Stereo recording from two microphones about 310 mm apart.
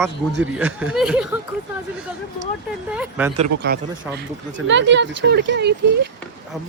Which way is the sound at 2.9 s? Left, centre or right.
Centre.